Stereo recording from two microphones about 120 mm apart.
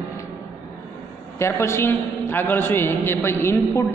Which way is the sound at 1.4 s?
20° left (ahead or behind).